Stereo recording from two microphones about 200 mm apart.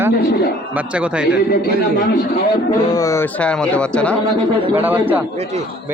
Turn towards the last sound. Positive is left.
turn(degrees=-10)  # may be behind; listen again after turning